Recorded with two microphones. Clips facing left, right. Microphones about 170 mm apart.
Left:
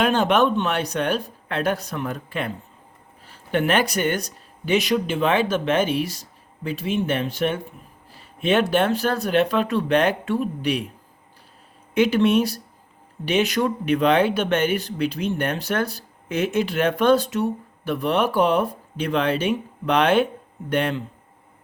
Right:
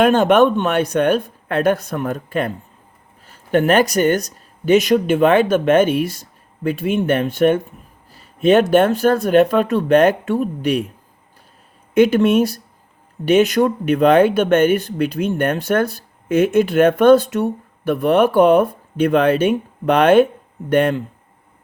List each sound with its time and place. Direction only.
0.0 s speech: 50° right (ahead or behind)
8.1 s speech: 40° right (ahead or behind)
11.9 s speech: 50° right (ahead or behind)